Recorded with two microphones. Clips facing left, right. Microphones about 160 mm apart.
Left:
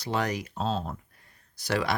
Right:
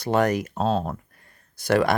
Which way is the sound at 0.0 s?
50° right (ahead or behind).